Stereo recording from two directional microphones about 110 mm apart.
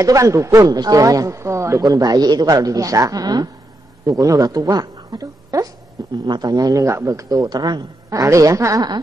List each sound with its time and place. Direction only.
0.0 s a woman's voice: 30° right (ahead or behind)